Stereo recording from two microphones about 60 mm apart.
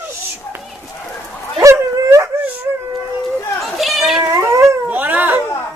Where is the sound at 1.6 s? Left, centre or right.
Right.